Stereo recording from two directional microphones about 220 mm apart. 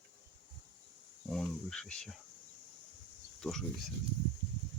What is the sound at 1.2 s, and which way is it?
Speech, 5° left (ahead or behind).